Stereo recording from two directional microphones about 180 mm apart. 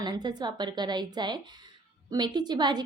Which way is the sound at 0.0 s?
25° right (ahead or behind).